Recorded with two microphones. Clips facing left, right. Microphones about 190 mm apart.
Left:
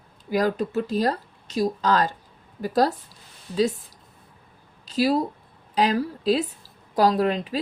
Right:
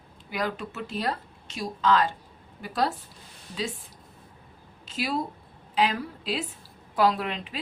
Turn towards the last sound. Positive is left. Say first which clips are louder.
# left 5 dB
turn(degrees=40)  # may be behind; listen again after turning